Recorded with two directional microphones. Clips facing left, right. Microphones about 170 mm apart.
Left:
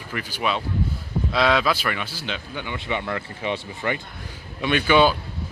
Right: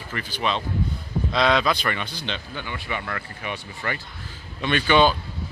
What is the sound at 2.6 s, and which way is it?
Speech, 20° left (ahead or behind).